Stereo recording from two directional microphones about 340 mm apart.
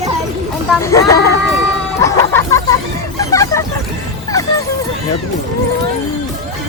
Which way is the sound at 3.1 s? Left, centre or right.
Centre.